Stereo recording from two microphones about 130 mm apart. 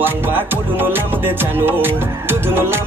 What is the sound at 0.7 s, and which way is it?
Music, 15° right (ahead or behind).